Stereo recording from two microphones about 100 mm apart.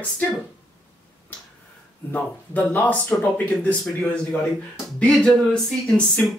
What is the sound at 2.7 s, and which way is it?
Speech, 15° left (ahead or behind).